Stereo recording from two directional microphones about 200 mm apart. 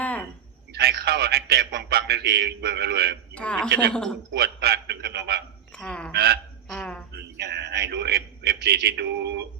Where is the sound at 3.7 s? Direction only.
55° right (ahead or behind).